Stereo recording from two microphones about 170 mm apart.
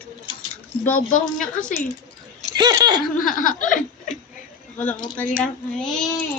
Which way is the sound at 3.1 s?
55° left (ahead or behind).